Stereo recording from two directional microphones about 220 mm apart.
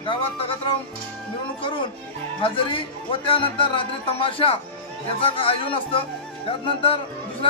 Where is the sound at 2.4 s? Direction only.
25° left (ahead or behind).